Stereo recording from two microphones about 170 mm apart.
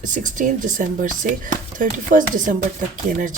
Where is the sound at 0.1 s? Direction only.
50° right (ahead or behind).